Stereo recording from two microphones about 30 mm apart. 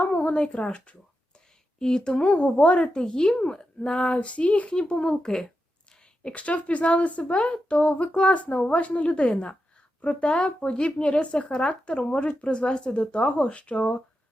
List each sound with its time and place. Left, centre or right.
0.3 s speech: left
1.8 s speech: centre
2.2 s speech: left
3.0 s speech: left
4.1 s speech: left
4.7 s speech: left
6.3 s speech: left
12.3 s speech: left
12.6 s speech: left
12.9 s speech: left